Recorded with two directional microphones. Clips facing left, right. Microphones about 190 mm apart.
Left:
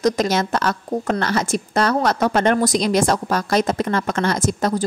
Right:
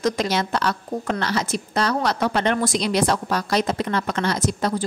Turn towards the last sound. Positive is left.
turn(degrees=45)  # may be behind; listen again after turning